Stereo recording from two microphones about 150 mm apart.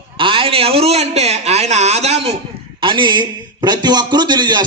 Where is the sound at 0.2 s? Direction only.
35° right (ahead or behind).